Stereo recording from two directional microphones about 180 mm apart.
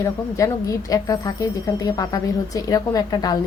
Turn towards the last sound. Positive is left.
turn(degrees=20)  # may be behind; listen again after turning